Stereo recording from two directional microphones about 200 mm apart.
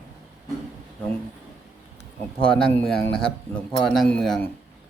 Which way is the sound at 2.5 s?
5° left (ahead or behind).